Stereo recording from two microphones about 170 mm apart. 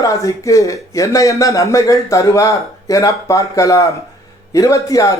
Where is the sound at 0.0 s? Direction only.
20° left (ahead or behind).